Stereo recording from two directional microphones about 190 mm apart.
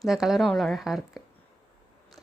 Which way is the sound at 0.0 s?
Centre (ahead or behind).